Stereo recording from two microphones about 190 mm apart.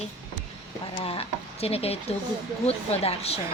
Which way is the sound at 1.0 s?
30° left (ahead or behind).